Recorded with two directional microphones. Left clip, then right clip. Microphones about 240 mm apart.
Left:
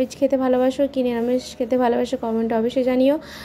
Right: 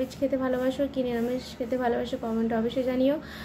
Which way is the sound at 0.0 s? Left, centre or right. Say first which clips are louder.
Left 8 dB; left.